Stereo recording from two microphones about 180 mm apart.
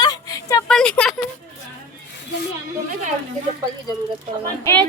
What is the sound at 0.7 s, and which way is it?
Speech, 5° left (ahead or behind).